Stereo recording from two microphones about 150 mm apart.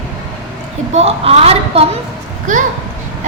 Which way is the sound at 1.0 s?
45° right (ahead or behind).